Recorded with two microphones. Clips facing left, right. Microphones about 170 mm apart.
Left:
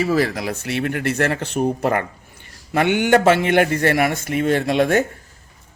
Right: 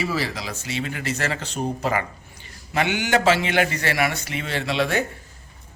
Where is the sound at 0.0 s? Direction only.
50° left (ahead or behind).